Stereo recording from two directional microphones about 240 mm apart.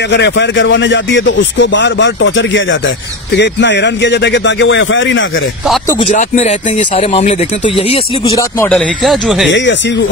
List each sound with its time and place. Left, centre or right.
0.1 s speech: left
6.1 s speech: left
8.4 s speech: centre
8.7 s speech: centre
9.5 s speech: left